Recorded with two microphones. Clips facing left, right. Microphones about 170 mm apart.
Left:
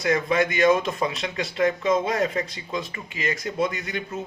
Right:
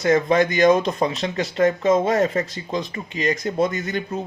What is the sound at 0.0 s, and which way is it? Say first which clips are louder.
A man's voice: right 5 dB; 40° right (ahead or behind).